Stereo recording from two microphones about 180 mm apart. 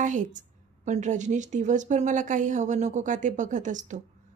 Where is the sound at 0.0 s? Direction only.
45° right (ahead or behind).